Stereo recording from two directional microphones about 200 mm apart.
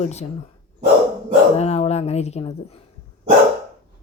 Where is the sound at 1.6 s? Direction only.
30° left (ahead or behind).